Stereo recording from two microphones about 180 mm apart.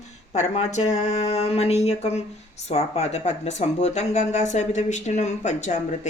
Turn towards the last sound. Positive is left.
turn(degrees=40)  # may be behind; listen again after turning